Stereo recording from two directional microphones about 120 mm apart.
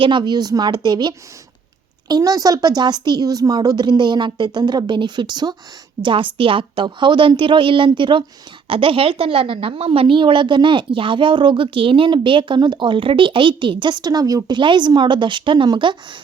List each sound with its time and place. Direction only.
0.0 s a woman's voice: 40° right (ahead or behind)